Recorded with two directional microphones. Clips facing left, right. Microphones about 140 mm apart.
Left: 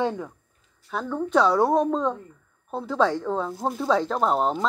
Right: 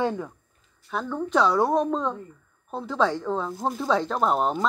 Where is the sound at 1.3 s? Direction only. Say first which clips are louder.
Left 2 dB; 45° left (ahead or behind).